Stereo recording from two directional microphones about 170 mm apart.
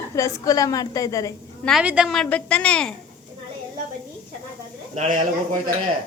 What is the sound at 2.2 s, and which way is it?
Speech, 10° left (ahead or behind).